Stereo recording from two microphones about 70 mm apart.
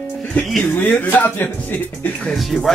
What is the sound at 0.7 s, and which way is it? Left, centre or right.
Speech, left.